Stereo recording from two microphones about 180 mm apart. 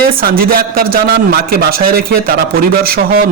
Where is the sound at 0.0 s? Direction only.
55° right (ahead or behind).